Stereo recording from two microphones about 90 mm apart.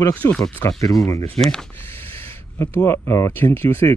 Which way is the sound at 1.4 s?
5° left (ahead or behind).